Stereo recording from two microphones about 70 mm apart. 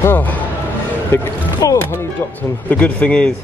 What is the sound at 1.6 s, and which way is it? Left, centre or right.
Speech, left.